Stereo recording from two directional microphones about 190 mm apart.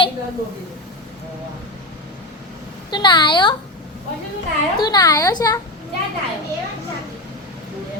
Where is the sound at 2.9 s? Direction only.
25° left (ahead or behind).